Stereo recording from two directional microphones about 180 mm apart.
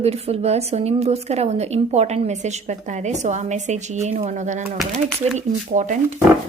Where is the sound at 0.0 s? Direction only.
35° right (ahead or behind).